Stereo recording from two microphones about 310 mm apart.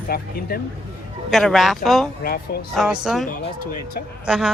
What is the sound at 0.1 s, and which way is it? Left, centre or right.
Speech, left.